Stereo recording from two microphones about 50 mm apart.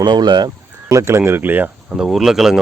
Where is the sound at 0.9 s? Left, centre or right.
Right.